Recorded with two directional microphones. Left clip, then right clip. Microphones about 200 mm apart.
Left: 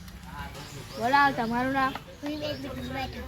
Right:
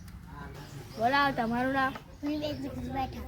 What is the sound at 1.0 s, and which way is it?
Speech, 40° right (ahead or behind).